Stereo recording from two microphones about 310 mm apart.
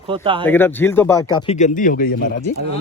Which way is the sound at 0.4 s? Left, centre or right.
Centre.